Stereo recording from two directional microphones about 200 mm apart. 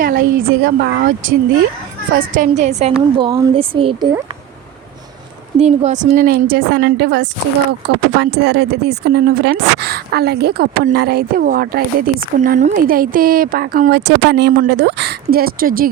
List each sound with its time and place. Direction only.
0.0 s a woman's voice: 45° right (ahead or behind)
2.1 s a woman's voice: 40° right (ahead or behind)
3.2 s speech: 20° right (ahead or behind)
5.5 s speech: 35° right (ahead or behind)